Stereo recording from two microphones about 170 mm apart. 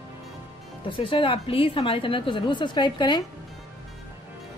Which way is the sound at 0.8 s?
30° left (ahead or behind).